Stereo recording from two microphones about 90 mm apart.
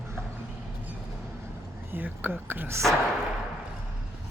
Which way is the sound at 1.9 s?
20° right (ahead or behind).